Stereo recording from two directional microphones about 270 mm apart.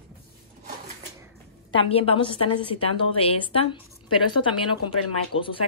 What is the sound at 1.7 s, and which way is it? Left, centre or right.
Speech, left.